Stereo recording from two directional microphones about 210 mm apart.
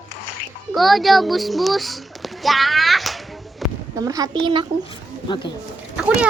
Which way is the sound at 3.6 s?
Centre (ahead or behind).